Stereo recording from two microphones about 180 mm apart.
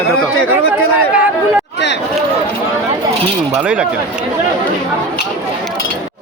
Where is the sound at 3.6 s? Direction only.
5° right (ahead or behind).